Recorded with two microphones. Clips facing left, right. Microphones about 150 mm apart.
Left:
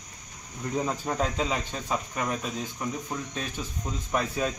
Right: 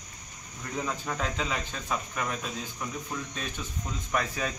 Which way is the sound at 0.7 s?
30° left (ahead or behind).